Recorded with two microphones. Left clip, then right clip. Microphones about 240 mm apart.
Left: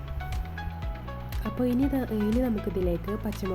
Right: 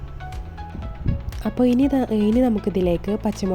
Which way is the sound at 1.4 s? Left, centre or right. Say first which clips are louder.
Right 8 dB; right.